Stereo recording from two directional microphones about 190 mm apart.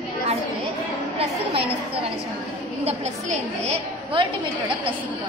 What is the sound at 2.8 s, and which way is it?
A woman's voice, 35° right (ahead or behind).